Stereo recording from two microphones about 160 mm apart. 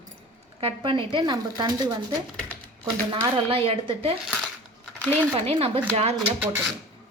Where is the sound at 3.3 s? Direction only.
35° right (ahead or behind).